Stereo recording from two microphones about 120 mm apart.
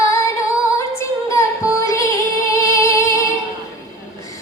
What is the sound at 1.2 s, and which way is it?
Music, 25° left (ahead or behind).